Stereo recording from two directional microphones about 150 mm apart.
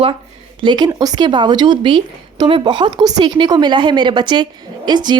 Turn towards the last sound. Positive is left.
turn(degrees=-30)  # may be behind; listen again after turning